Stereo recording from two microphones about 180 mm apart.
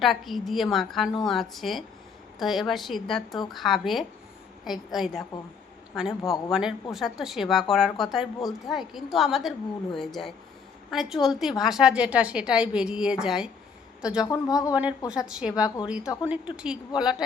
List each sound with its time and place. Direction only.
0.0 s a woman's voice: centre (ahead or behind)
14.2 s a woman's voice: 20° left (ahead or behind)
14.8 s a woman's voice: 5° right (ahead or behind)